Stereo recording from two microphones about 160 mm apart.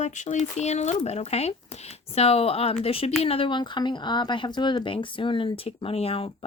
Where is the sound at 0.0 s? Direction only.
50° left (ahead or behind).